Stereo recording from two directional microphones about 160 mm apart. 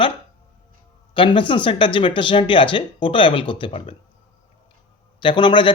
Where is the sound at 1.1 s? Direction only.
30° left (ahead or behind).